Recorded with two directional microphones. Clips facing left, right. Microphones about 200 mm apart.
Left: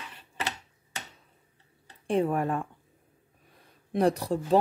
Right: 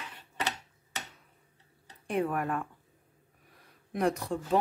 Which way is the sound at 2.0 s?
30° left (ahead or behind).